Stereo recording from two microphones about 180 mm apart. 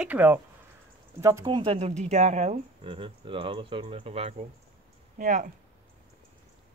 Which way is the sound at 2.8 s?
30° right (ahead or behind).